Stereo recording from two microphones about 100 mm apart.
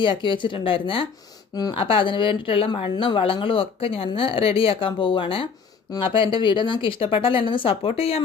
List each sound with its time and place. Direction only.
0.0 s speech: 55° left (ahead or behind); by 8.2 s 80° left